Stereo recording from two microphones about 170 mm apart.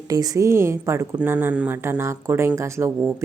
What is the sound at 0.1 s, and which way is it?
A woman's voice, 20° right (ahead or behind).